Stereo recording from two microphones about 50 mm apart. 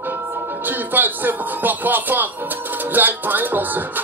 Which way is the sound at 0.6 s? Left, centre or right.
Right.